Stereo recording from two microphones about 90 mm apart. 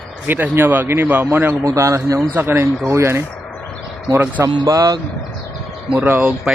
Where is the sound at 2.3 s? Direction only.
25° right (ahead or behind).